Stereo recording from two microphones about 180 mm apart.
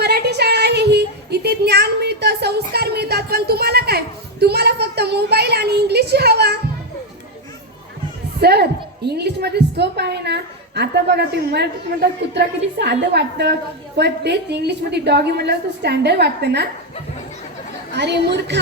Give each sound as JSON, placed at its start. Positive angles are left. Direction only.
{"t": 0.0, "sound": "a sound", "side_deg": -65}
{"t": 8.4, "sound": "a woman's voice", "side_deg": -60}
{"t": 17.9, "sound": "a woman's voice", "side_deg": -70}